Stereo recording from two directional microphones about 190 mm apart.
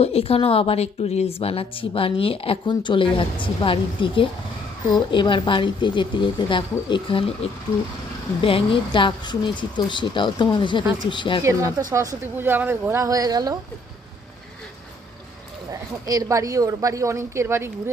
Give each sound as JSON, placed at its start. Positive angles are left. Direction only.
{"t": 0.0, "sound": "a woman's voice", "side_deg": 30}
{"t": 11.9, "sound": "speech", "side_deg": -15}
{"t": 15.7, "sound": "speech", "side_deg": -15}